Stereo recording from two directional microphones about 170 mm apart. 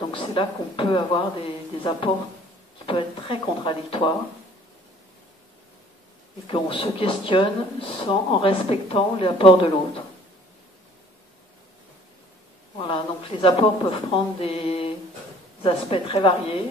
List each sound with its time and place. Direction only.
0.1 s speech: 30° left (ahead or behind)
6.4 s speech: 30° left (ahead or behind)
12.7 s speech: 30° left (ahead or behind)